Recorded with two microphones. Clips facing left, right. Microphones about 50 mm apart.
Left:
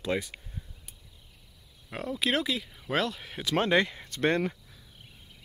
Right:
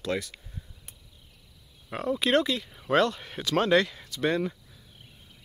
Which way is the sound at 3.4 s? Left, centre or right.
Centre.